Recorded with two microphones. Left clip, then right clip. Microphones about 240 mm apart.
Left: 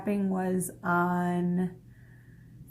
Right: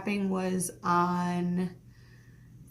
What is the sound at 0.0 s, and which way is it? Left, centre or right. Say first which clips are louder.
Speech: left 1 dB; centre.